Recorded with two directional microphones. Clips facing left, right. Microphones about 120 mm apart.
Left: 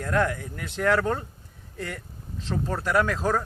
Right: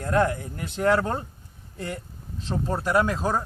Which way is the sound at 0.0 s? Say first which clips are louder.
Right 2 dB; 30° right (ahead or behind).